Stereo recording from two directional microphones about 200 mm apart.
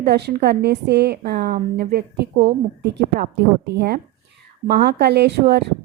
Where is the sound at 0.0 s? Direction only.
55° right (ahead or behind).